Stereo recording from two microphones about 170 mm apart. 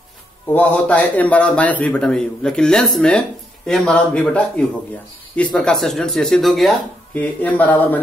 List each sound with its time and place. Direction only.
0.5 s a man's voice: 10° left (ahead or behind)